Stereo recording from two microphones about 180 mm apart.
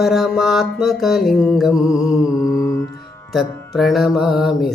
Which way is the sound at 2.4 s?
20° left (ahead or behind).